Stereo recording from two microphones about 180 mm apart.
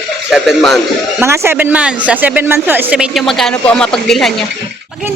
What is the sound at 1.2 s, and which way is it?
Speech, 15° right (ahead or behind).